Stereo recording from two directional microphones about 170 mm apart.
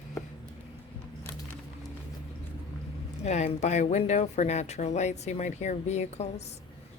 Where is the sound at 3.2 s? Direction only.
40° left (ahead or behind).